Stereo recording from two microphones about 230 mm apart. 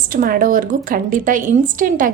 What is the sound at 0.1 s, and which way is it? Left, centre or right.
A woman's voice, right.